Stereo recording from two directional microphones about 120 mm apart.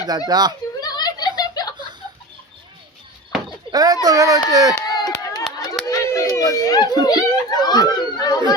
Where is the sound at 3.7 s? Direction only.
30° right (ahead or behind).